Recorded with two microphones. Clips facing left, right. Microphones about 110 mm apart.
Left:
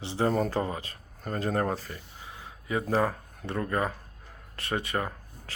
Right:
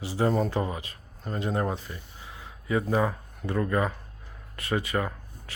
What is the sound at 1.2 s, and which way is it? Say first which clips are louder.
Speech: even; 45° left (ahead or behind).